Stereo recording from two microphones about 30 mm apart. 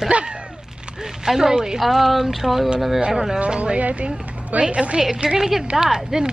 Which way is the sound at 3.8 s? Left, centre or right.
Right.